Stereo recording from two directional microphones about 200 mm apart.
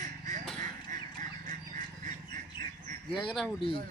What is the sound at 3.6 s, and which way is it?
Speech, 25° left (ahead or behind).